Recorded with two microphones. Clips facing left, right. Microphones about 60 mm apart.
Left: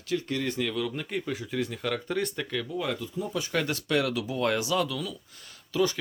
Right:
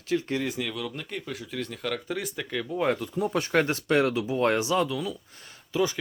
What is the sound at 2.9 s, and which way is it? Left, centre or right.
Speech, right.